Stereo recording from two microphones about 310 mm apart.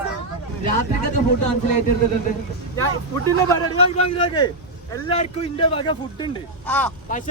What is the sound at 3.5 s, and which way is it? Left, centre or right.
Speech, centre.